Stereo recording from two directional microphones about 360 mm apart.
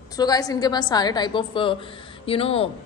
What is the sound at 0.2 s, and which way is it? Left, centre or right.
A woman's voice, centre.